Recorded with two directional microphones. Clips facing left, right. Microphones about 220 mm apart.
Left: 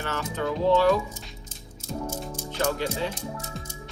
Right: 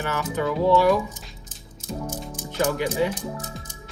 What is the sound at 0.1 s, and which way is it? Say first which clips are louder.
Speech: right 3 dB; 10° right (ahead or behind).